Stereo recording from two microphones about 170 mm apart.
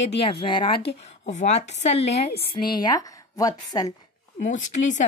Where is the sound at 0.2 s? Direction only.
35° left (ahead or behind).